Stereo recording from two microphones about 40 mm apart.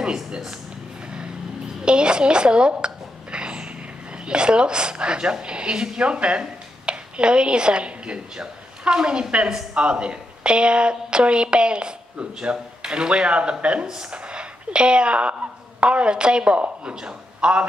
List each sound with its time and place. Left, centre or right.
0.0 s speech: right
1.0 s vehicle: right
1.9 s a woman's voice: right